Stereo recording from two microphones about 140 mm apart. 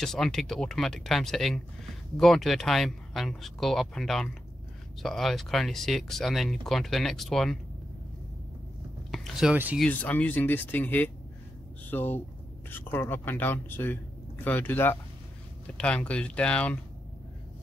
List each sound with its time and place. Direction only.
0.0 s speech: 5° left (ahead or behind)
9.1 s speech: centre (ahead or behind)
9.8 s speech: 10° left (ahead or behind)